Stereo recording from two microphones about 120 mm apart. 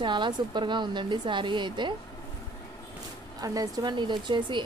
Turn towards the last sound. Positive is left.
turn(degrees=-40)  # may be behind; listen again after turning